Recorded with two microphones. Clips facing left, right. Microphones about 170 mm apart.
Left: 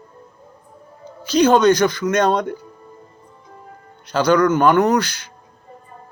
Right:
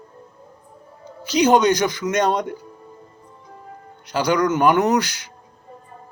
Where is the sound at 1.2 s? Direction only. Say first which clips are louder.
Left 2 dB; 15° right (ahead or behind).